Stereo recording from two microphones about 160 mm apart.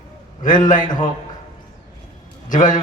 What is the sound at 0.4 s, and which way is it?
Speech, 55° left (ahead or behind).